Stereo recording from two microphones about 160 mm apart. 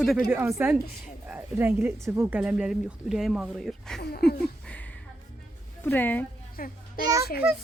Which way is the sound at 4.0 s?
85° left.